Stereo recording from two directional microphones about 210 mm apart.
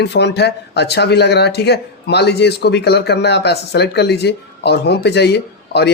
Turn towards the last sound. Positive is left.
turn(degrees=50)  # may be behind; listen again after turning